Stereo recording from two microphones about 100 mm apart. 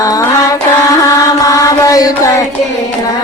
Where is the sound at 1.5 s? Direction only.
35° left (ahead or behind).